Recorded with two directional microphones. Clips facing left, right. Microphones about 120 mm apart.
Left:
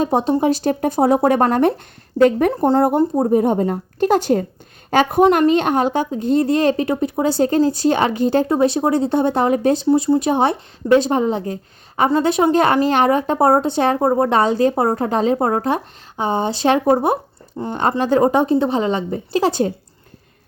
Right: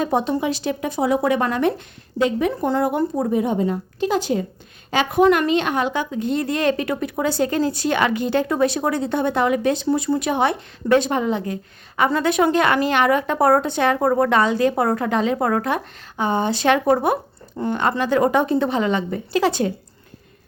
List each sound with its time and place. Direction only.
0.0 s speech: 35° left (ahead or behind)
2.5 s speech: 35° left (ahead or behind); by 4.4 s 55° left (ahead or behind)
4.9 s speech: 45° left (ahead or behind)
9.8 s speech: 25° left (ahead or behind)